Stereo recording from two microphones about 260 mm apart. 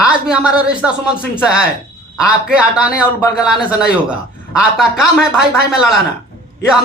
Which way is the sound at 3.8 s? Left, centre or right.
Centre.